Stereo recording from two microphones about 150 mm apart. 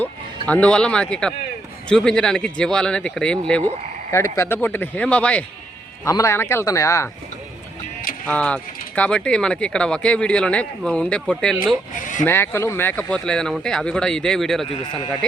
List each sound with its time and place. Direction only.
0.0 s speech: 10° left (ahead or behind)
4.1 s speech: 20° left (ahead or behind)
6.1 s speech: 20° left (ahead or behind)
8.3 s speech: 5° left (ahead or behind)
11.9 s speech: 60° left (ahead or behind)
12.2 s speech: 15° left (ahead or behind)